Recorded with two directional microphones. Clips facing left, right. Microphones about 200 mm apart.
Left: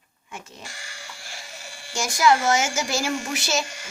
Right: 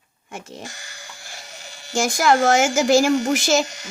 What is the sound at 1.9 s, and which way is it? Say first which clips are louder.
Speech: right 2 dB; 50° right (ahead or behind).